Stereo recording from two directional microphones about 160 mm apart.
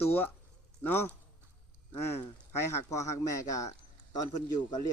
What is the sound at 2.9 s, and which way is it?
Speech, 20° left (ahead or behind).